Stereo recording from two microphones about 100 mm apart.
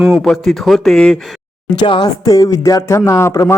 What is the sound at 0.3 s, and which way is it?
Speech, centre (ahead or behind).